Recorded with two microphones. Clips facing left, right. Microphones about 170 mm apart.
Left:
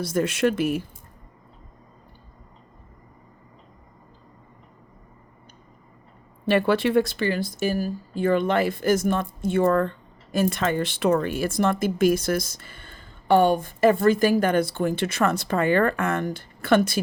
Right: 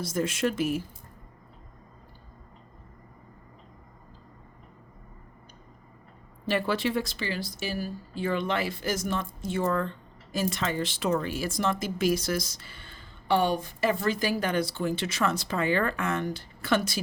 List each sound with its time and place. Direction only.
0.0 s speech: 65° left (ahead or behind)
6.4 s speech: 60° left (ahead or behind)